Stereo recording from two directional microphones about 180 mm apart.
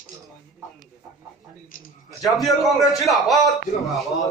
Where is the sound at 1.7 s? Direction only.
50° left (ahead or behind).